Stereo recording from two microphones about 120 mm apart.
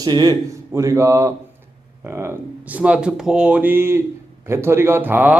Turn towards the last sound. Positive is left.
turn(degrees=-15)  # may be behind; listen again after turning